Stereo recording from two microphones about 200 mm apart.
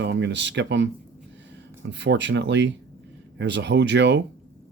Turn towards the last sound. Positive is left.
turn(degrees=-60)  # may be behind; listen again after turning